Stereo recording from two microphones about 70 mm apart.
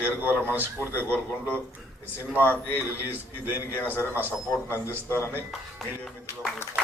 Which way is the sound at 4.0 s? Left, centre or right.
Right.